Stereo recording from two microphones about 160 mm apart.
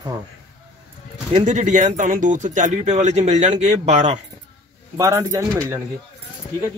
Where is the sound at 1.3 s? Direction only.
50° right (ahead or behind).